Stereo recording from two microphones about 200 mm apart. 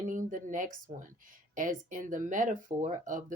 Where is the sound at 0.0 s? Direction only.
40° right (ahead or behind).